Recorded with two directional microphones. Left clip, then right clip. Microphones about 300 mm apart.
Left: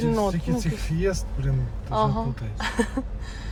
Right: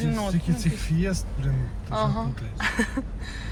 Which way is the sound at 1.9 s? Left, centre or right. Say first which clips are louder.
Left 3 dB; centre.